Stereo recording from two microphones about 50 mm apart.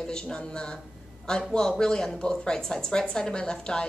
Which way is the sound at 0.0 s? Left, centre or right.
Centre.